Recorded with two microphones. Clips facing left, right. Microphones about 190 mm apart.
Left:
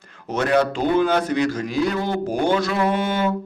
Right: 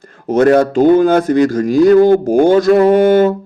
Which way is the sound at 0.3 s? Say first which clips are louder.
Right 9 dB; 45° right (ahead or behind).